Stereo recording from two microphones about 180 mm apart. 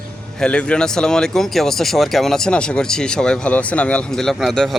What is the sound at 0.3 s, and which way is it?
Speech, 5° left (ahead or behind).